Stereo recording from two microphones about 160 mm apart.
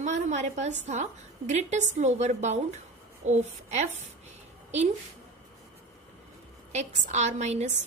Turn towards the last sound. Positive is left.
turn(degrees=-45)  # may be behind; listen again after turning